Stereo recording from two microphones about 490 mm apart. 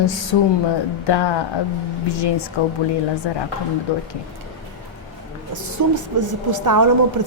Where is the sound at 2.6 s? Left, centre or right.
Left.